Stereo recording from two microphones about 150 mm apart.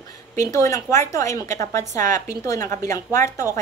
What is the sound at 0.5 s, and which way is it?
A woman's voice, 20° left (ahead or behind).